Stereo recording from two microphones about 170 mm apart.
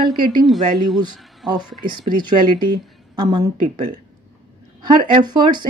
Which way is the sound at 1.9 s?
55° right (ahead or behind).